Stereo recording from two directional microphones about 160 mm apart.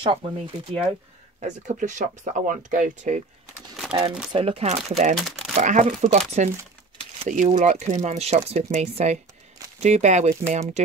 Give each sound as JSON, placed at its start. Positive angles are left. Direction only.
{"t": 0.0, "sound": "speech", "side_deg": -30}
{"t": 1.4, "sound": "speech", "side_deg": -50}
{"t": 4.3, "sound": "speech", "side_deg": -35}